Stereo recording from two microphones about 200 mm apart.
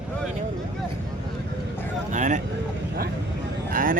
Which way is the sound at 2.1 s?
40° right (ahead or behind).